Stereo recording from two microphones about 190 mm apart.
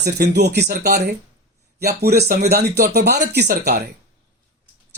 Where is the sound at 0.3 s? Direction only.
60° right (ahead or behind).